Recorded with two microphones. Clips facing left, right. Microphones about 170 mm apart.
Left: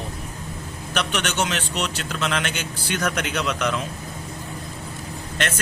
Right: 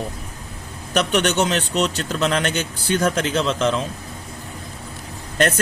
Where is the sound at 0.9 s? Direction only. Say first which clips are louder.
Right 6 dB; 40° right (ahead or behind).